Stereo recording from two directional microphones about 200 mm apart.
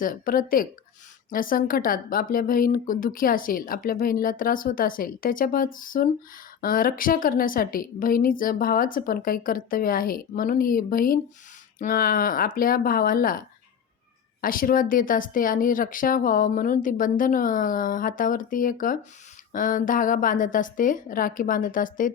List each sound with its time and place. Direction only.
0.0 s speech: 45° left (ahead or behind)
14.4 s speech: 45° left (ahead or behind)